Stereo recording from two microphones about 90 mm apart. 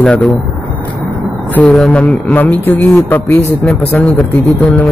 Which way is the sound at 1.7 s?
5° left (ahead or behind).